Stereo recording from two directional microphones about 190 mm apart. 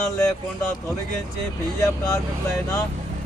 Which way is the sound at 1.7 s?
15° left (ahead or behind).